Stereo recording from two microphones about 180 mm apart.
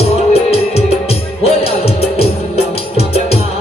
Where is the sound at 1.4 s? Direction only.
35° left (ahead or behind).